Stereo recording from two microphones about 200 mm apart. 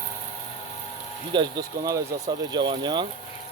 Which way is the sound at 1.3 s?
20° right (ahead or behind).